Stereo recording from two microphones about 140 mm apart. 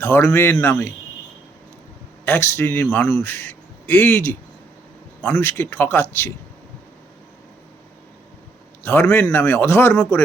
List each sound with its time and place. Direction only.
0.0 s speech: 15° left (ahead or behind)
2.2 s speech: 15° left (ahead or behind)
5.4 s speech: 15° left (ahead or behind)
8.8 s a man's voice: 15° left (ahead or behind)